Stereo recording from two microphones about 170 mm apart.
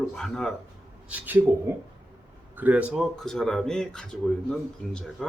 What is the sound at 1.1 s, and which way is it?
Speech, 10° right (ahead or behind).